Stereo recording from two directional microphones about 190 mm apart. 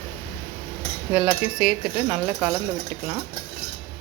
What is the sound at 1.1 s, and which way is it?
Cutlery, 5° right (ahead or behind).